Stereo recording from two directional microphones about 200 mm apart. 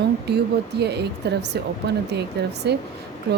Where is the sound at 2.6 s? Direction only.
60° right (ahead or behind).